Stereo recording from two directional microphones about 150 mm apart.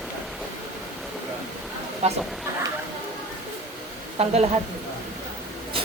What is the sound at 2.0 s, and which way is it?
Speech, 45° right (ahead or behind).